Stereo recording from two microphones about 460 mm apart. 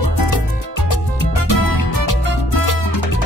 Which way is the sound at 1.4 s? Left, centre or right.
Left.